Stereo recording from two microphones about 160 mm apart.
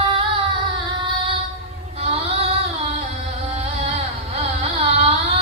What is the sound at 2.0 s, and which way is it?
Child singing, 40° right (ahead or behind).